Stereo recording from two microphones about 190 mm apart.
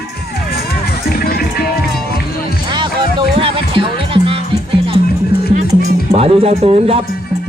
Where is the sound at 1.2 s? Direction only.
55° left (ahead or behind).